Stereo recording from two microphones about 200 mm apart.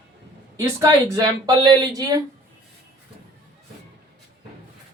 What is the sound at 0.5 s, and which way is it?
Speech, 15° right (ahead or behind).